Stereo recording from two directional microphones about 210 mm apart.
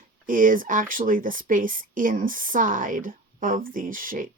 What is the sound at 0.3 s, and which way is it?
Speech, 40° right (ahead or behind).